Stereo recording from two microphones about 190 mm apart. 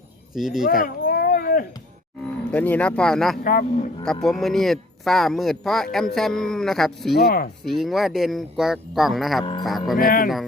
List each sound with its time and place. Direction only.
0.3 s speech: centre (ahead or behind)
0.7 s a sound: 50° left (ahead or behind)
2.5 s speech: 10° left (ahead or behind)
3.4 s a man's voice: 45° left (ahead or behind)
4.0 s speech: 5° left (ahead or behind)
7.2 s a man's voice: 50° left (ahead or behind)
7.6 s speech: centre (ahead or behind)
9.4 s speech: 25° left (ahead or behind)
9.6 s speech: centre (ahead or behind)
10.0 s a man's voice: 50° left (ahead or behind)